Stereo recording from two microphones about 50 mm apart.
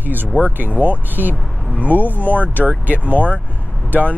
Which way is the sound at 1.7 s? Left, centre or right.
Left.